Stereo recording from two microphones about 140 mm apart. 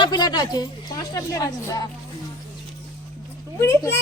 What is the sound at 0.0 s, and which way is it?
A woman's voice, 30° left (ahead or behind).